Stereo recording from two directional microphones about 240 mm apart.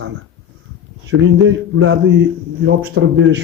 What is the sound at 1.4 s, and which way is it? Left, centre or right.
Speech, right.